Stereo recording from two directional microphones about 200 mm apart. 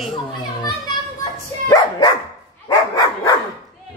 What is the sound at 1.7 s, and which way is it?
Dog, 20° left (ahead or behind).